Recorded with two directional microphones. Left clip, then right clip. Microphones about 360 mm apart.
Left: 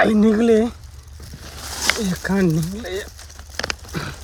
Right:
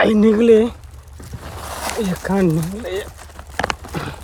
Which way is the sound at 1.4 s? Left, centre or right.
Centre.